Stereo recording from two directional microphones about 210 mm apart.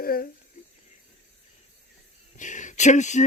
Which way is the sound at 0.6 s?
35° left (ahead or behind).